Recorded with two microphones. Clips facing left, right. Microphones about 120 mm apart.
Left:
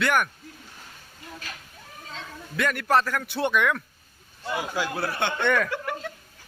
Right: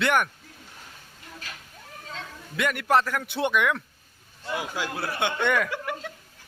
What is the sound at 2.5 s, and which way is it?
A man's voice, 15° right (ahead or behind).